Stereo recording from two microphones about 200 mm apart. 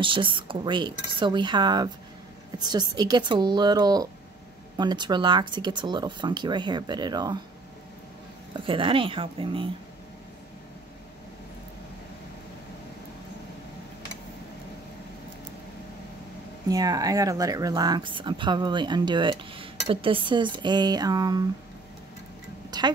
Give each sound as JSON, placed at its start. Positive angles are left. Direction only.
{"t": 0.0, "sound": "speech", "side_deg": -25}
{"t": 8.5, "sound": "speech", "side_deg": -25}
{"t": 16.6, "sound": "speech", "side_deg": -20}
{"t": 22.7, "sound": "a sound", "side_deg": -20}